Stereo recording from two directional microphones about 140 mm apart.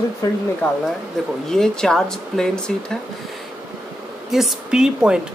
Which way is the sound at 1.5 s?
5° left (ahead or behind).